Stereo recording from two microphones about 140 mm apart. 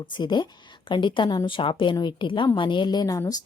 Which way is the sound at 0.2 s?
30° left (ahead or behind).